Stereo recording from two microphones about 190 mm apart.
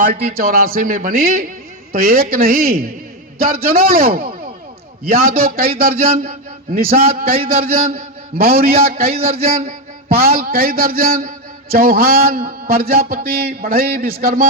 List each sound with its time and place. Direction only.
0.0 s a man's voice: 45° right (ahead or behind)
9.1 s a man's voice: 30° right (ahead or behind)
10.2 s a man's voice: 50° right (ahead or behind)